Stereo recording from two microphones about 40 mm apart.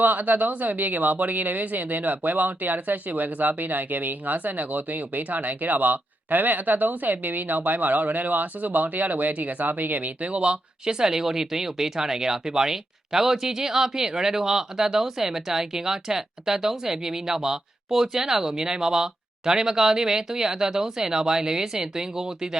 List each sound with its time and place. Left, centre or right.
0.0 s speech: right; by 21.1 s centre
21.1 s speech: right